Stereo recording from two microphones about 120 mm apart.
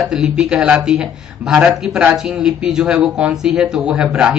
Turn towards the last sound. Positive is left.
turn(degrees=-5)  # may be behind; listen again after turning